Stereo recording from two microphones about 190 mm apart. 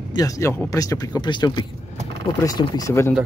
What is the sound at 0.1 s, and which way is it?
Speech, 15° left (ahead or behind).